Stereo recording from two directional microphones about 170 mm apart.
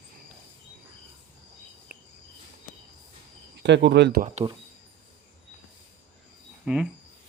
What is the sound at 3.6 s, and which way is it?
Speech, 90° right.